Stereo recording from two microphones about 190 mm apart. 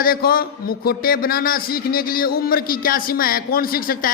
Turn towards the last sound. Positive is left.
turn(degrees=50)  # may be behind; listen again after turning